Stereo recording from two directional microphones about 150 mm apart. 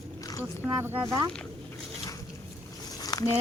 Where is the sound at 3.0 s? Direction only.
25° left (ahead or behind).